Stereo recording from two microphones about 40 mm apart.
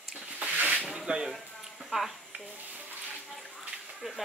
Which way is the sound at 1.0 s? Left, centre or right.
Centre.